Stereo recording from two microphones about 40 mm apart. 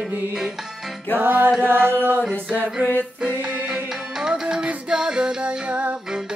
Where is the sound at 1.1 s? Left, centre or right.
Right.